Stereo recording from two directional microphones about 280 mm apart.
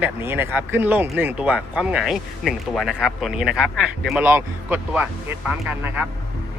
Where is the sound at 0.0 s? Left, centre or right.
Centre.